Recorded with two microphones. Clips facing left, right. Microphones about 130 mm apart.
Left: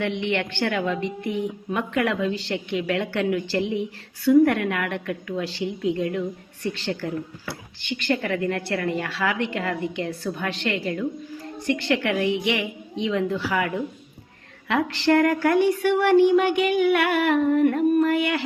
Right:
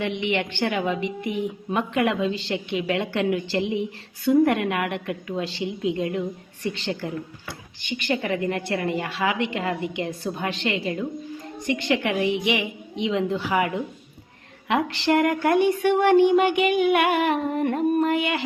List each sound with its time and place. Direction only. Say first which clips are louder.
0.0 s a woman's voice: even; 15° right (ahead or behind)